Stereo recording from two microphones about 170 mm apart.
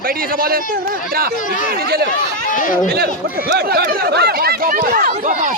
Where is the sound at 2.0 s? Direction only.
50° left (ahead or behind).